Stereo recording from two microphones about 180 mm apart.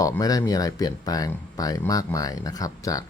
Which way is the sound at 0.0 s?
20° left (ahead or behind).